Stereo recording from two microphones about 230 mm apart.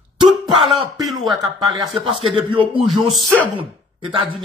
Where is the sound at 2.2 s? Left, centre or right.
Right.